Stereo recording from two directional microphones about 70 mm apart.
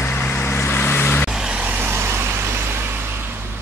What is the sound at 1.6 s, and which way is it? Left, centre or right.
Vehicle, right.